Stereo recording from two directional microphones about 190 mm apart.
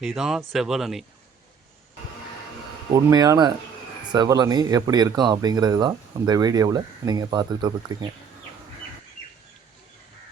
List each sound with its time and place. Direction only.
0.0 s speech: centre (ahead or behind)
2.9 s speech: 20° right (ahead or behind)